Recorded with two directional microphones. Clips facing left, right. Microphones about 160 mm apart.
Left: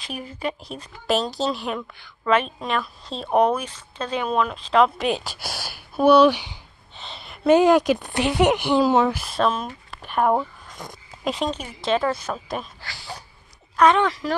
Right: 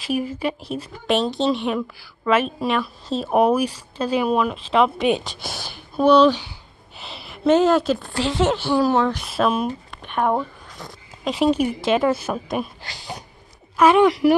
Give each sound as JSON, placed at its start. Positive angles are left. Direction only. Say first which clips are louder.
{"t": 0.0, "sound": "speech", "louder": "right 6 dB", "side_deg": -5}
{"t": 7.0, "sound": "a sound", "louder": "right 1 dB", "side_deg": -5}
{"t": 7.4, "sound": "speech", "louder": "left 1 dB", "side_deg": 10}
{"t": 9.2, "sound": "speech", "louder": "right 2 dB", "side_deg": -5}
{"t": 9.8, "sound": "a sound", "louder": "left 6 dB", "side_deg": 5}
{"t": 10.8, "sound": "speech", "louder": "even", "side_deg": 15}
{"t": 11.2, "sound": "a woman's voice", "louder": "right 7 dB", "side_deg": -5}
{"t": 12.8, "sound": "a woman's voice", "louder": "right 3 dB", "side_deg": -20}